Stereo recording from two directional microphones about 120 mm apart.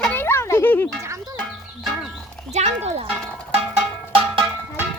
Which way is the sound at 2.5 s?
70° right (ahead or behind).